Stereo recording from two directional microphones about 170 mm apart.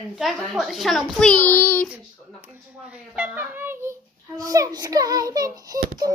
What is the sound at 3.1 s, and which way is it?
A child's voice, 10° right (ahead or behind).